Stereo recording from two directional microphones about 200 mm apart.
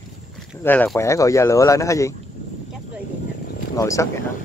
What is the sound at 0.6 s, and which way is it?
Speech, 10° left (ahead or behind).